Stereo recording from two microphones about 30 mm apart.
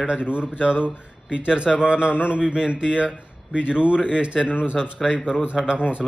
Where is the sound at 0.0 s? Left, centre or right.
Right.